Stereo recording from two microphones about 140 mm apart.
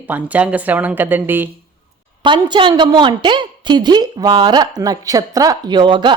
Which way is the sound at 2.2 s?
35° right (ahead or behind).